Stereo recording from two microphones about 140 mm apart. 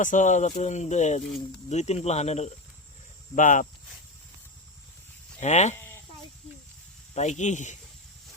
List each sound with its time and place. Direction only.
0.0 s speech: 65° left (ahead or behind)
3.3 s speech: 65° left (ahead or behind)
5.4 s speech: 55° left (ahead or behind)
7.1 s speech: 55° left (ahead or behind)